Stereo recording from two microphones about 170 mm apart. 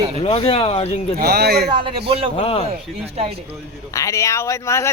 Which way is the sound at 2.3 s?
35° left (ahead or behind).